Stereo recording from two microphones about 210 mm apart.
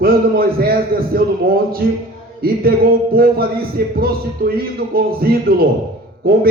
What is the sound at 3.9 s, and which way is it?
Speech, 45° right (ahead or behind).